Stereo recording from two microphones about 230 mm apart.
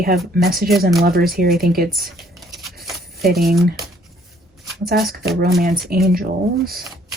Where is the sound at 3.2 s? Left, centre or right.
Right.